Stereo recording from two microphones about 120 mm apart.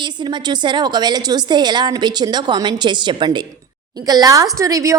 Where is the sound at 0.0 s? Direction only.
40° right (ahead or behind).